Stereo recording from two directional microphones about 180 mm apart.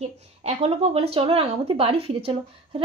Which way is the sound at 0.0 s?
35° right (ahead or behind).